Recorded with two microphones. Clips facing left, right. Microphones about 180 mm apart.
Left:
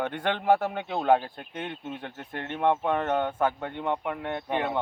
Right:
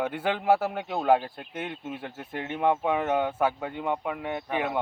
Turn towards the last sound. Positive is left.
turn(degrees=-10)  # may be behind; listen again after turning